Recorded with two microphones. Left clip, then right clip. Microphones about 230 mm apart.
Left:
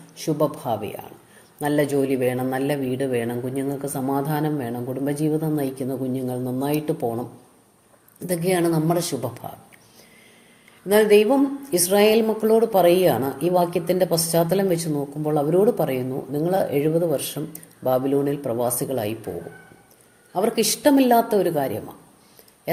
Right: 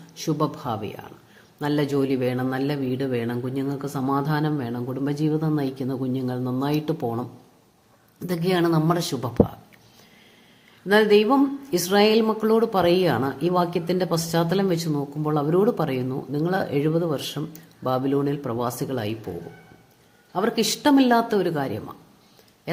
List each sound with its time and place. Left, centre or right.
0.2 s speech: right
8.3 s speech: right
10.8 s speech: right
20.3 s speech: right